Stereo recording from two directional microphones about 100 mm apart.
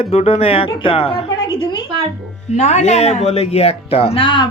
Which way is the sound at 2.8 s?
90° left.